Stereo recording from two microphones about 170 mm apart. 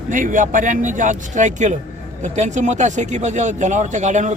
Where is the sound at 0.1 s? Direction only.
50° right (ahead or behind).